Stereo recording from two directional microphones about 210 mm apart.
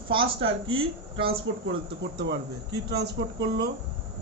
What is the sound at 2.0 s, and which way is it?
Speech, 55° right (ahead or behind).